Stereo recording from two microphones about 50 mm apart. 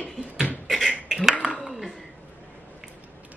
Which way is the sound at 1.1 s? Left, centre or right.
Centre.